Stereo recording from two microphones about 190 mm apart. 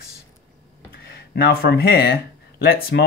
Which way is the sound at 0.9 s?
55° left (ahead or behind).